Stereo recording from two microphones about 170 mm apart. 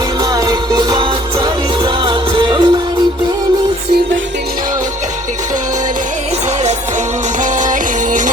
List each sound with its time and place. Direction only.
0.3 s music: 25° right (ahead or behind)
7.6 s music: 50° right (ahead or behind)